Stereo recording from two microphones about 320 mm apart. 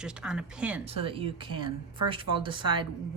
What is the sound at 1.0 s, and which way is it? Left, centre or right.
A woman's voice, centre.